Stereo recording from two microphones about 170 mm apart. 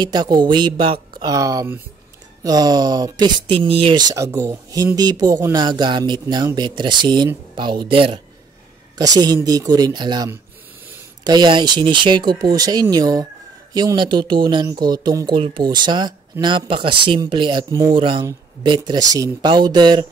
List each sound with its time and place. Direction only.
0.0 s speech: 25° right (ahead or behind)
1.2 s speech: 20° right (ahead or behind)